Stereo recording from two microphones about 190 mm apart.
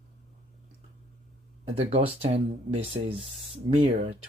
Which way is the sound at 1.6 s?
30° right (ahead or behind).